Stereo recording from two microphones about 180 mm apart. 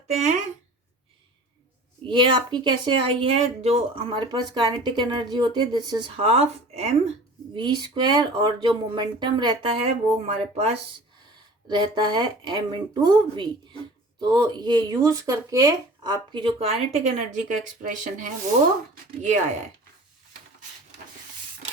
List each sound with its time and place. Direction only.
0.1 s speech: 40° right (ahead or behind)
2.0 s speech: 25° right (ahead or behind)
7.5 s speech: 25° right (ahead or behind); by 18.3 s 45° right (ahead or behind)